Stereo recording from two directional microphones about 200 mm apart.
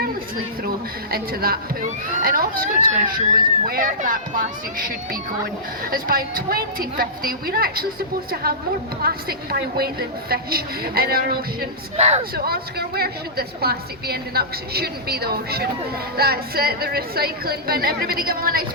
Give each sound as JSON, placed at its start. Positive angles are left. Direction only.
{"t": 1.1, "sound": "a woman's voice", "side_deg": -50}
{"t": 11.9, "sound": "speech", "side_deg": -35}
{"t": 12.3, "sound": "a woman's voice", "side_deg": -50}